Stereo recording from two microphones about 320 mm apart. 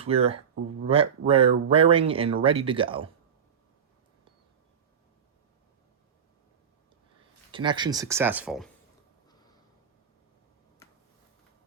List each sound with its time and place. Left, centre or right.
0.0 s speech: centre
7.5 s speech: centre